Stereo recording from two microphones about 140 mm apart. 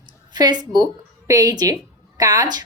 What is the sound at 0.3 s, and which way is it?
A woman's voice, 30° right (ahead or behind).